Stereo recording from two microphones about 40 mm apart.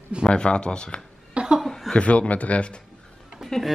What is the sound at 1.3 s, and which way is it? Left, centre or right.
Laughter, right.